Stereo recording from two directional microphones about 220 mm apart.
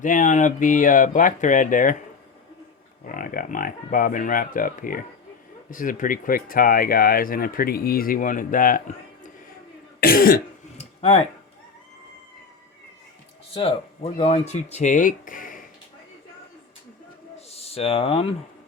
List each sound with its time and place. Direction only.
0.0 s speech: 35° left (ahead or behind)
3.1 s speech: 40° left (ahead or behind)
10.0 s cough: 40° left (ahead or behind)
13.5 s speech: 25° left (ahead or behind)
17.3 s a sound: 30° left (ahead or behind)